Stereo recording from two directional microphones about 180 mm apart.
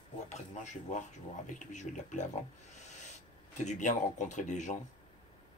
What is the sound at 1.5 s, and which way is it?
Speech, 45° left (ahead or behind).